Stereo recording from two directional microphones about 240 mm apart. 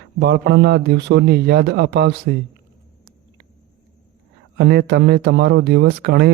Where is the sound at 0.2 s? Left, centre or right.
Right.